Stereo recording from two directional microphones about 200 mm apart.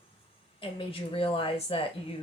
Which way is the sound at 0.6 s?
25° left (ahead or behind).